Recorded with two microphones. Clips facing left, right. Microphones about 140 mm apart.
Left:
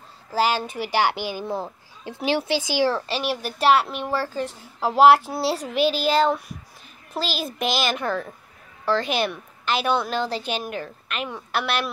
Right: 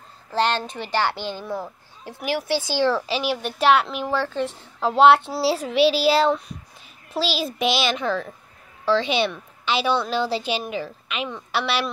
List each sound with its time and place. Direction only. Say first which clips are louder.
0.3 s speech: even; 5° left (ahead or behind)
1.4 s speech: left 1 dB; 25° left (ahead or behind)
2.9 s a child's voice: right 2 dB; centre (ahead or behind)